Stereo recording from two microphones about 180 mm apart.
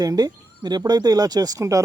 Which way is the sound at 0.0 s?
20° right (ahead or behind).